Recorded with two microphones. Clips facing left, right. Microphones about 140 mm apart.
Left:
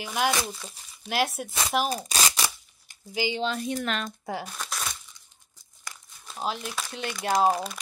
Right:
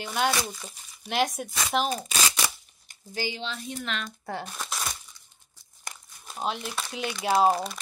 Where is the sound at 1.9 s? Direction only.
35° left (ahead or behind).